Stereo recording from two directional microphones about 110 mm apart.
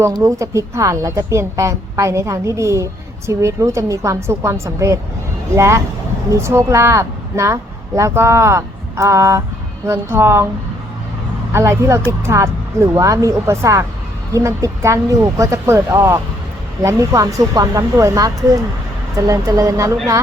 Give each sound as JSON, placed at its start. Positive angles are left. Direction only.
{"t": 0.2, "sound": "a woman's voice", "side_deg": -30}
{"t": 11.5, "sound": "a woman's voice", "side_deg": -25}